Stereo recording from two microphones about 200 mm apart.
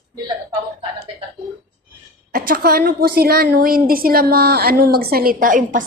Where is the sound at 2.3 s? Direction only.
45° right (ahead or behind).